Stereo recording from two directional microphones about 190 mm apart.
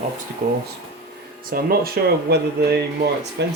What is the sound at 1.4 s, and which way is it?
Speech, 50° right (ahead or behind).